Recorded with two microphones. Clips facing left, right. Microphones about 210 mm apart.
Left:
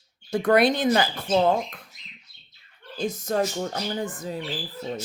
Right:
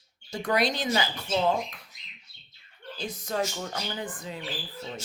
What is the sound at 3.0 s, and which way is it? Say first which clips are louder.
Speech: left 6 dB; 45° left (ahead or behind).